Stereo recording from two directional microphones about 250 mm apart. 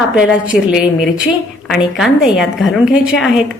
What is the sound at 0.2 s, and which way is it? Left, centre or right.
A woman's voice, centre.